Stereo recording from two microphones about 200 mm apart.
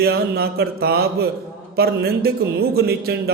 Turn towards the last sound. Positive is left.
turn(degrees=-50)  # may be behind; listen again after turning